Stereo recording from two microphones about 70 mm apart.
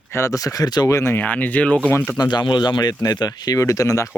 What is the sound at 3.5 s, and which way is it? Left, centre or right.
Speech, left.